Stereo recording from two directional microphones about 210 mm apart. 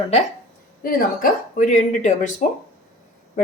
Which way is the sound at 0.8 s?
45° left (ahead or behind).